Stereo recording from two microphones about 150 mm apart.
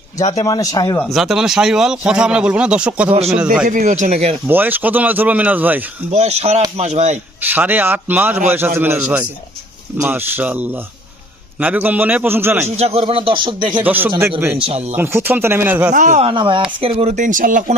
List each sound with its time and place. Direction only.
0.4 s speech: 25° left (ahead or behind)
0.9 s speech: centre (ahead or behind)
3.1 s speech: 45° right (ahead or behind)
3.7 s speech: 60° right (ahead or behind); by 4.4 s 45° right (ahead or behind)
4.4 s speech: 10° right (ahead or behind)
6.1 s speech: 45° right (ahead or behind)
7.4 s speech: 10° right (ahead or behind)
12.6 s speech: 45° right (ahead or behind)
13.8 s speech: 10° right (ahead or behind)
14.6 s speech: 45° right (ahead or behind)
14.9 s speech: 15° right (ahead or behind)
15.9 s speech: 55° right (ahead or behind)
16.3 s speech: 35° right (ahead or behind); by 17.7 s 60° right (ahead or behind)